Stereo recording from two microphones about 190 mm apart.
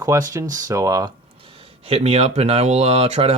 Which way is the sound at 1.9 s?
35° right (ahead or behind).